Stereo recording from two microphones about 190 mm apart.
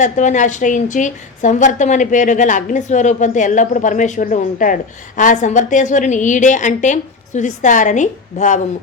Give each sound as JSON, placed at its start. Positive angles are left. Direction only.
{"t": 0.0, "sound": "a woman's voice", "side_deg": 40}